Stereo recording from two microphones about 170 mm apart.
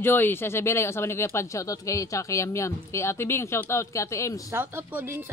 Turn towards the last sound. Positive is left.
turn(degrees=-10)  # may be behind; listen again after turning